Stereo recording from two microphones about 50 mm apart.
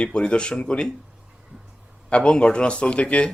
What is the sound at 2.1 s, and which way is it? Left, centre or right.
Speech, left.